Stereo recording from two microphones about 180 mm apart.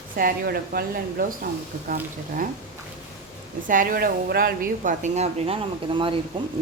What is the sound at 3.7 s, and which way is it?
Speech, 50° right (ahead or behind).